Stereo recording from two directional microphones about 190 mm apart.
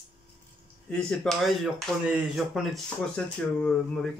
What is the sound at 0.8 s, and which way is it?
Speech, 5° left (ahead or behind).